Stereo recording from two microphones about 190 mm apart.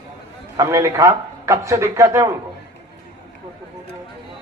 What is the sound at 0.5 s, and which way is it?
A man's voice, 15° right (ahead or behind).